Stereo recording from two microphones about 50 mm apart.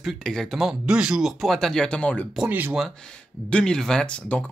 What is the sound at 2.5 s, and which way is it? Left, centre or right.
Speech, right.